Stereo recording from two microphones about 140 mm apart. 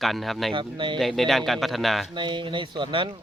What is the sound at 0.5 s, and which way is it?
Speech, 35° right (ahead or behind).